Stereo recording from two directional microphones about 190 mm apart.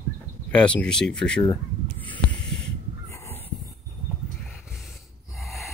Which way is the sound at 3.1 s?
15° left (ahead or behind).